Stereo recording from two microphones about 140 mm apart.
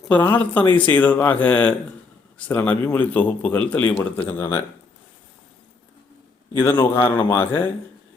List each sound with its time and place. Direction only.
0.1 s speech: 15° left (ahead or behind)
6.6 s speech: 15° left (ahead or behind)